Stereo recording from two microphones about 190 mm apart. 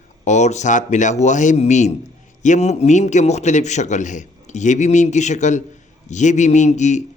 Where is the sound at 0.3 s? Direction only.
40° left (ahead or behind).